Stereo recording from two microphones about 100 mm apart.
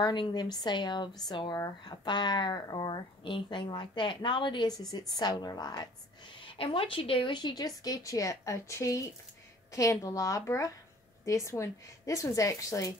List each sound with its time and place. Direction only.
0.0 s a woman's voice: 50° left (ahead or behind)